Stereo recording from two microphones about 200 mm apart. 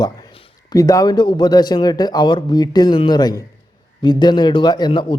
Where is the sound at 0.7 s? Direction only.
15° left (ahead or behind).